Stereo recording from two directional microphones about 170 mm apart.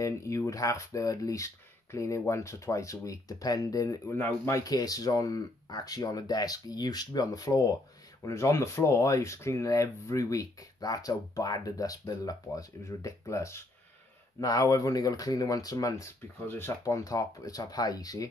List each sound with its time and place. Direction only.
0.0 s speech: 20° left (ahead or behind)